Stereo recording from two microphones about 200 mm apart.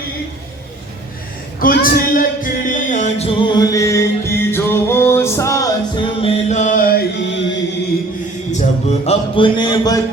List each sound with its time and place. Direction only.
1.5 s music: 45° left (ahead or behind); by 6.1 s 15° left (ahead or behind)
6.2 s chant: 35° left (ahead or behind); by 7.5 s 65° left (ahead or behind)
8.5 s speech: 35° left (ahead or behind); by 10.0 s 20° left (ahead or behind)